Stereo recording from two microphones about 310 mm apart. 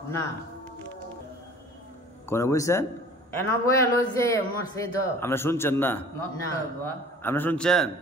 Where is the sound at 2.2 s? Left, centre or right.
Centre.